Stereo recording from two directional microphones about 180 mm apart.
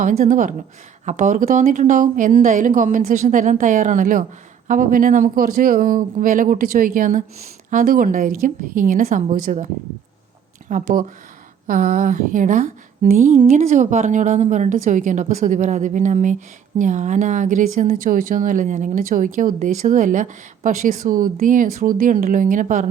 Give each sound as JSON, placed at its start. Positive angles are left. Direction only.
{"t": 0.0, "sound": "a woman's voice", "side_deg": -50}
{"t": 10.7, "sound": "a woman's voice", "side_deg": -45}